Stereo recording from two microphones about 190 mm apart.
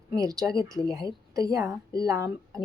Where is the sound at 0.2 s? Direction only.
20° right (ahead or behind).